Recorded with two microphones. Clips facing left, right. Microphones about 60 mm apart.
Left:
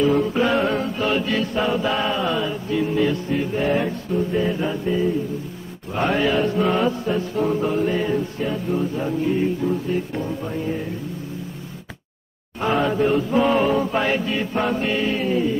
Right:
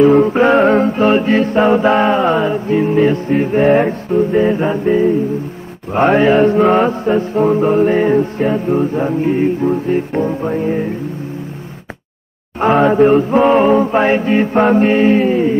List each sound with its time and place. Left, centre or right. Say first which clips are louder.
0.0 s mantra: right 9 dB; right
12.5 s mantra: right 10 dB; right